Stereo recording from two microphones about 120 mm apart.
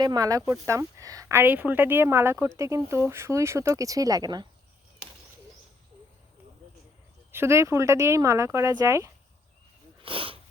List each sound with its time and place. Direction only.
0.0 s speech: 30° right (ahead or behind)
7.3 s speech: 20° right (ahead or behind)
10.0 s speech: 50° right (ahead or behind)